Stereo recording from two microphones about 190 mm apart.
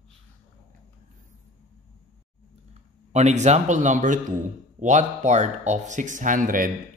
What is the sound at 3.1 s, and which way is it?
Speech, 35° right (ahead or behind).